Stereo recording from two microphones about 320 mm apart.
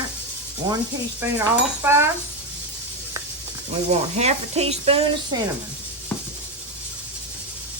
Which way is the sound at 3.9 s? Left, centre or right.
Right.